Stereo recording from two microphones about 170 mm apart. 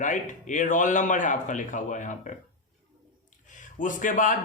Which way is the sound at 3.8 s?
50° left (ahead or behind).